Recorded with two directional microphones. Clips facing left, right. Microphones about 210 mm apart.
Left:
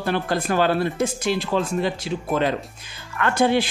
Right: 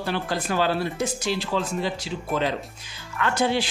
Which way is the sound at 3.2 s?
55° left (ahead or behind).